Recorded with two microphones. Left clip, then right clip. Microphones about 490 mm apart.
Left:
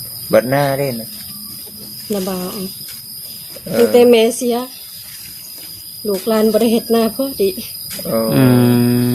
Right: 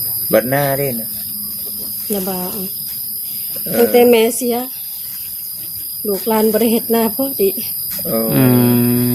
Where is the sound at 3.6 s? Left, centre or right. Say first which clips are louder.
Left 1 dB; right.